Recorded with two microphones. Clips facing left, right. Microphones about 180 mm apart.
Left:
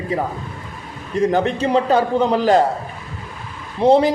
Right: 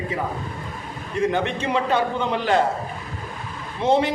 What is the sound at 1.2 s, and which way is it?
A man's voice, 35° left (ahead or behind).